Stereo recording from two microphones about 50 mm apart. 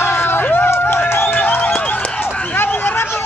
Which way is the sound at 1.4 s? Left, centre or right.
Left.